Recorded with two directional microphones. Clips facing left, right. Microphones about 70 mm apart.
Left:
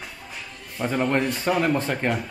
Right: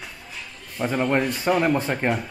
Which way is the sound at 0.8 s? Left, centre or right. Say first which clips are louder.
Right 1 dB; centre.